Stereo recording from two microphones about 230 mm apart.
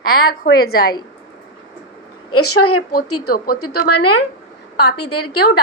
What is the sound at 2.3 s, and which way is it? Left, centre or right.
A woman's voice, left.